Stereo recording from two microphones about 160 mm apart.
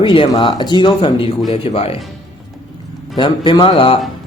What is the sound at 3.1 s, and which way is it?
Speech, 30° left (ahead or behind).